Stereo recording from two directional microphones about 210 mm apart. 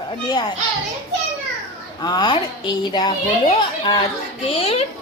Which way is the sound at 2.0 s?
20° left (ahead or behind).